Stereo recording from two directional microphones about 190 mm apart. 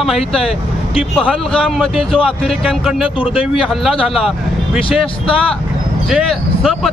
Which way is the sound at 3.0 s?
30° left (ahead or behind).